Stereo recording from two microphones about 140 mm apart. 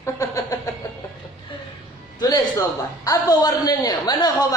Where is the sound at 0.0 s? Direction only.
20° left (ahead or behind).